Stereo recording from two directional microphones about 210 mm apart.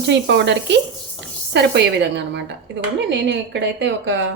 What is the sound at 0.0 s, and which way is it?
A woman's voice, 55° right (ahead or behind).